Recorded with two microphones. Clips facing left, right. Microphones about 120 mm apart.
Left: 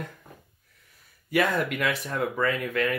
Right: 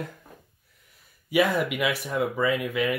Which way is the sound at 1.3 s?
10° right (ahead or behind).